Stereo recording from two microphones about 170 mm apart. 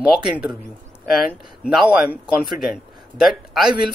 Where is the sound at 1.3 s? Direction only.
5° right (ahead or behind).